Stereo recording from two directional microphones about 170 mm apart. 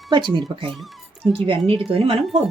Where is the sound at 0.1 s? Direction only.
25° right (ahead or behind).